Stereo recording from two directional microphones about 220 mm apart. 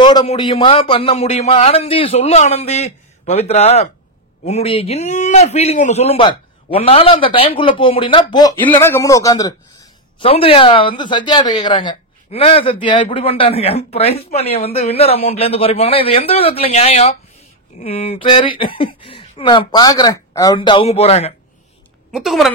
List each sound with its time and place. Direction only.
0.0 s speech: 20° left (ahead or behind)
10.1 s speech: 25° left (ahead or behind)
22.1 s a woman's voice: centre (ahead or behind)